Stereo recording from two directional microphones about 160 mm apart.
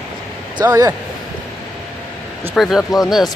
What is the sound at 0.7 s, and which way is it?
Speech, 20° right (ahead or behind).